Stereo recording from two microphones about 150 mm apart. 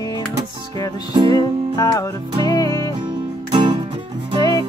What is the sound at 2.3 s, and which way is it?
Music, 35° right (ahead or behind).